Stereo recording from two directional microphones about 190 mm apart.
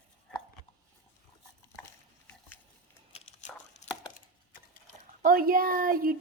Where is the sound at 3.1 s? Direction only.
30° left (ahead or behind).